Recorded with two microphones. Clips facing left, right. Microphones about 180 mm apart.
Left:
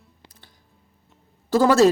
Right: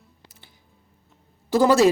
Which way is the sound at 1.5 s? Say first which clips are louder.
Left 1 dB; 15° right (ahead or behind).